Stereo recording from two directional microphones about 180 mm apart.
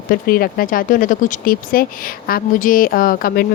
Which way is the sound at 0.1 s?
55° left (ahead or behind).